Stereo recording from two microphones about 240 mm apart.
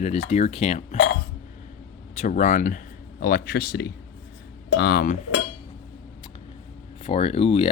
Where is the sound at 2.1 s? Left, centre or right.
Left.